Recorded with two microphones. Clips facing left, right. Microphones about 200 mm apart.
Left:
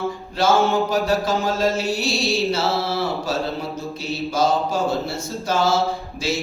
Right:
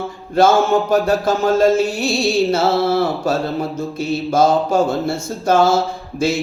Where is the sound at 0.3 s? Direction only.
50° right (ahead or behind).